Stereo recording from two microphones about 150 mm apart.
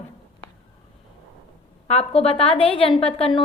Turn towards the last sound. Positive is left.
turn(degrees=40)  # may be behind; listen again after turning